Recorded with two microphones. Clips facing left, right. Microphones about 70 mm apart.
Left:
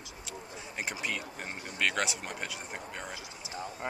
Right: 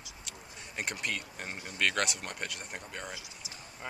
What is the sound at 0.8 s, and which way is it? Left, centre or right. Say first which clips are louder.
Speech: even; centre.